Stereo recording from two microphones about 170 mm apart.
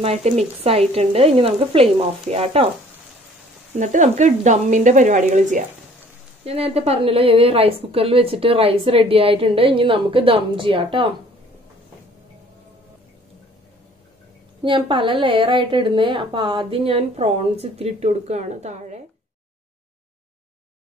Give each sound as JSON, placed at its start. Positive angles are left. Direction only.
{"t": 0.0, "sound": "a woman's voice", "side_deg": -40}
{"t": 3.8, "sound": "speech", "side_deg": -45}
{"t": 6.4, "sound": "a woman's voice", "side_deg": -35}
{"t": 14.6, "sound": "a woman's voice", "side_deg": -30}